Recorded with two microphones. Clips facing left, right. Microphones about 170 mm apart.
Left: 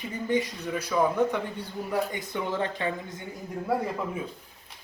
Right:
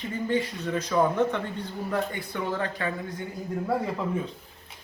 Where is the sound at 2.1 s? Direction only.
20° left (ahead or behind).